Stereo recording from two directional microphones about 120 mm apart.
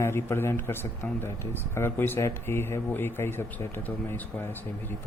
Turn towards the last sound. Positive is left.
turn(degrees=20)  # may be behind; listen again after turning